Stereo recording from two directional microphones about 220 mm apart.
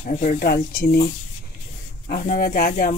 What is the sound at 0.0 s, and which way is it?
Speech, 35° left (ahead or behind).